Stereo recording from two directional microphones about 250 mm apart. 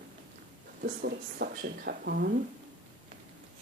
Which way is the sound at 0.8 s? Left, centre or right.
Right.